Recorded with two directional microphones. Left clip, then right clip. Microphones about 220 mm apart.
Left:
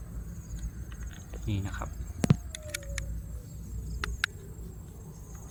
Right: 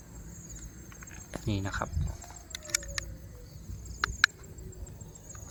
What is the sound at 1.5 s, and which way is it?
Speech, 40° right (ahead or behind).